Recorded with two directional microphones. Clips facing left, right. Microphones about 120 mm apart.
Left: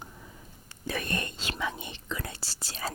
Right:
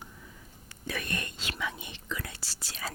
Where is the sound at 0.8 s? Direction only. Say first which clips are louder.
Left 3 dB; 30° left (ahead or behind).